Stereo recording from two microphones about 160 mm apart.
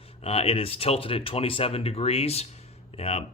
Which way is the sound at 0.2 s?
40° left (ahead or behind).